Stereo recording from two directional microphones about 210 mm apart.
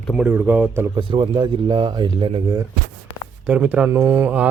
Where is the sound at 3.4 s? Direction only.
5° right (ahead or behind).